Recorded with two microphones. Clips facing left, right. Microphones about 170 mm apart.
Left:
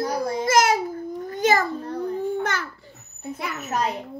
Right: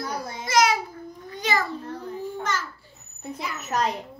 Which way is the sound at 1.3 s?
50° left (ahead or behind).